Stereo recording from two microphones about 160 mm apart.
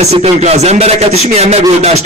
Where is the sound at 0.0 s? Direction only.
40° right (ahead or behind).